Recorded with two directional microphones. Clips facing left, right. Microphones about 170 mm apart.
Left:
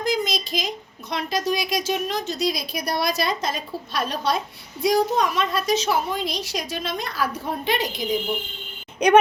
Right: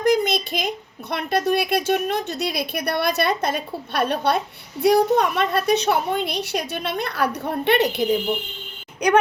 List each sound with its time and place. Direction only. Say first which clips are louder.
0.0 s a woman's voice: right 5 dB; 60° right (ahead or behind)